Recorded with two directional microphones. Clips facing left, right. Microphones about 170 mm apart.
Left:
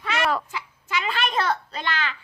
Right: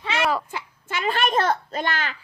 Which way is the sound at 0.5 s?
50° right (ahead or behind).